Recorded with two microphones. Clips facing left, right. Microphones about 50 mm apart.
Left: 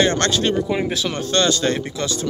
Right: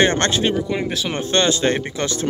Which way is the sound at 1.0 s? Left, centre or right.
Right.